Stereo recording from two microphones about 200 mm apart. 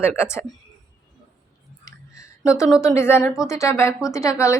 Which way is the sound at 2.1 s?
15° left (ahead or behind).